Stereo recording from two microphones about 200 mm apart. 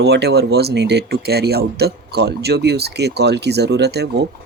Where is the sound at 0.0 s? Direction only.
55° right (ahead or behind).